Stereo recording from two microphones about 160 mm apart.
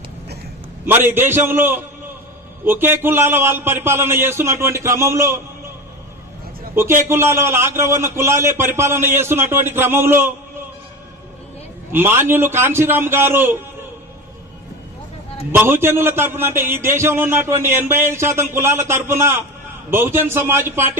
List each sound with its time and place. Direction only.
0.9 s a man's voice: 15° right (ahead or behind)
7.0 s a man's voice: 15° right (ahead or behind)
11.9 s a man's voice: 15° right (ahead or behind)
15.5 s a man's voice: 15° right (ahead or behind)